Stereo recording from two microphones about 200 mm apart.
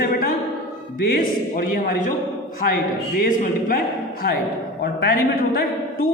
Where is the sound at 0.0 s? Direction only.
45° left (ahead or behind).